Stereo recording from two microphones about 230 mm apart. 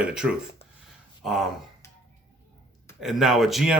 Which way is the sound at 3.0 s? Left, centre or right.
Centre.